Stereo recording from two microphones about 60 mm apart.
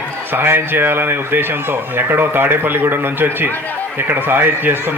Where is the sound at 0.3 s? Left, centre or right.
Right.